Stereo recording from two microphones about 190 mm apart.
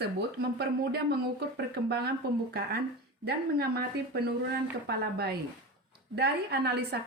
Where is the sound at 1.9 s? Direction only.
55° right (ahead or behind).